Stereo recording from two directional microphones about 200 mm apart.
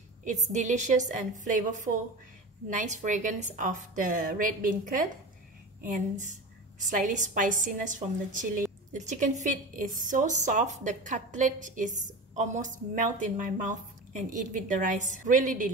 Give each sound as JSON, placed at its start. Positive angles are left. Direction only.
{"t": 0.2, "sound": "a woman's voice", "side_deg": -35}